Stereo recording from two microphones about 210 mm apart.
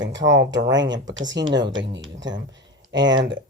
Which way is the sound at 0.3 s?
60° right (ahead or behind).